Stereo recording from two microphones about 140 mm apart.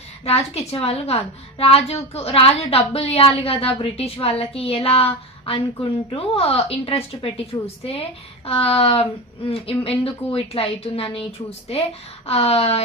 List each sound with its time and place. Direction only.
0.3 s a woman's voice: 45° left (ahead or behind)